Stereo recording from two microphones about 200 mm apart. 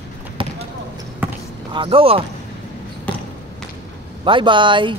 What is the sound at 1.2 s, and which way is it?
Basketball bounce, 10° right (ahead or behind).